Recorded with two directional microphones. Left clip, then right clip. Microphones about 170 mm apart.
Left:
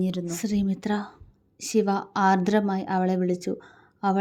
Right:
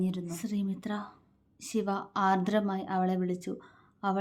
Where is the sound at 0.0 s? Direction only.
25° left (ahead or behind).